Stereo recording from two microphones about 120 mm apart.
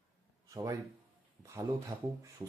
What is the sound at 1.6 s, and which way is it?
Speech, 20° right (ahead or behind).